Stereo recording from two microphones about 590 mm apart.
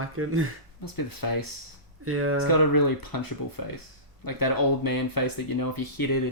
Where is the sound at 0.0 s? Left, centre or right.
Right.